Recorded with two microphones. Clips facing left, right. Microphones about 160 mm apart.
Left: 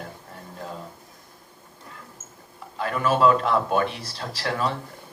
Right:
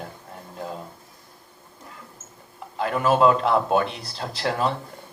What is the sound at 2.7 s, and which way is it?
Speech, 20° right (ahead or behind).